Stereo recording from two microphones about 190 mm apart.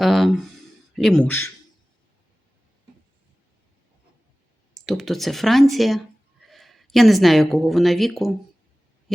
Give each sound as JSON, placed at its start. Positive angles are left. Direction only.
{"t": 0.0, "sound": "a sound", "side_deg": 0}
{"t": 0.9, "sound": "a man's voice", "side_deg": 0}
{"t": 4.7, "sound": "a man's voice", "side_deg": 0}